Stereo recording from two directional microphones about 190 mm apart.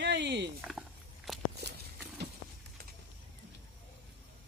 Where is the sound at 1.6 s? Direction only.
60° right (ahead or behind).